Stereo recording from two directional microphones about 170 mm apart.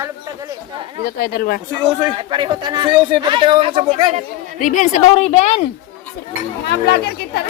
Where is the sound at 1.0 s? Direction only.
65° left (ahead or behind).